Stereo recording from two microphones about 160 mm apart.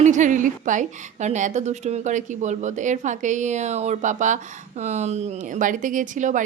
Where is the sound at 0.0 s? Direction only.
50° right (ahead or behind).